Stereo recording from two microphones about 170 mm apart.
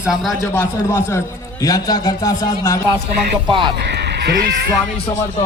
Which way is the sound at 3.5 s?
30° right (ahead or behind).